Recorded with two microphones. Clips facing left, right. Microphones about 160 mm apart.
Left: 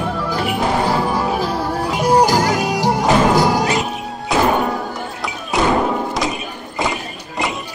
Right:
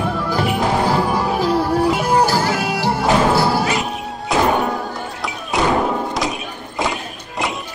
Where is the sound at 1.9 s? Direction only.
15° left (ahead or behind).